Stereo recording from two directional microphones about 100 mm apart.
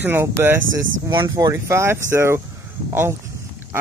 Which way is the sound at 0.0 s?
20° right (ahead or behind).